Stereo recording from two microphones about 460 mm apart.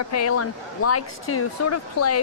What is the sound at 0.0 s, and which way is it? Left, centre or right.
Speech, left.